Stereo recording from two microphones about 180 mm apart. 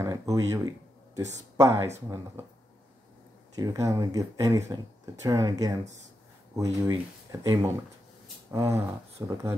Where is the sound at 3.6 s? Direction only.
15° right (ahead or behind).